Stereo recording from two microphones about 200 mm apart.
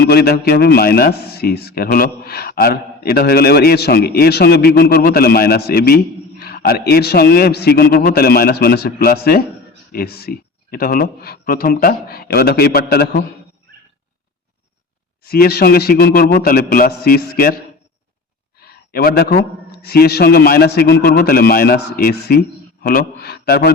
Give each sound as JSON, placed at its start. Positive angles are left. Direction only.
{"t": 0.1, "sound": "a man's voice", "side_deg": 50}
{"t": 15.3, "sound": "a man's voice", "side_deg": 50}
{"t": 18.6, "sound": "a man's voice", "side_deg": 50}